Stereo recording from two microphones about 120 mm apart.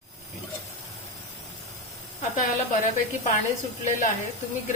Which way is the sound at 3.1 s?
90° left.